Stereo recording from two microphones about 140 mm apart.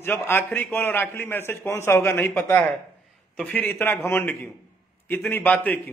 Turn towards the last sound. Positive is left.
turn(degrees=10)  # may be behind; listen again after turning